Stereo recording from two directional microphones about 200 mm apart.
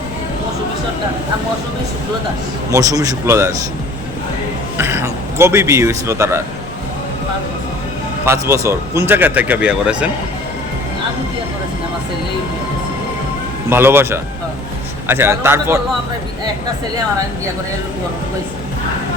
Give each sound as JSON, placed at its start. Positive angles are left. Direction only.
{"t": 2.7, "sound": "speech", "side_deg": -15}
{"t": 4.8, "sound": "speech", "side_deg": -10}
{"t": 8.2, "sound": "speech", "side_deg": -15}
{"t": 13.7, "sound": "speech", "side_deg": -10}